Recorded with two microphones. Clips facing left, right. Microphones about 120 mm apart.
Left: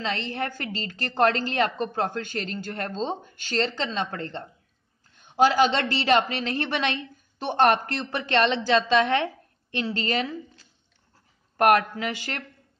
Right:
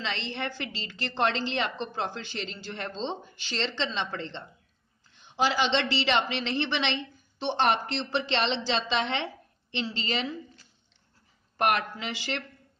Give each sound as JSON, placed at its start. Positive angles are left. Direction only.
{"t": 0.0, "sound": "a woman's voice", "side_deg": 45}
{"t": 11.5, "sound": "a woman's voice", "side_deg": 50}